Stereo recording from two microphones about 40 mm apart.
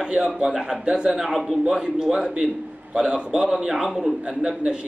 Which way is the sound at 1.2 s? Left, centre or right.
Centre.